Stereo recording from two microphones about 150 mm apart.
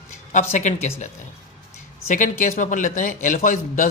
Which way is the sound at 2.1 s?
60° left (ahead or behind).